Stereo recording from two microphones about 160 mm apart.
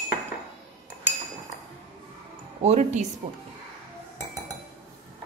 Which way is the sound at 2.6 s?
45° right (ahead or behind).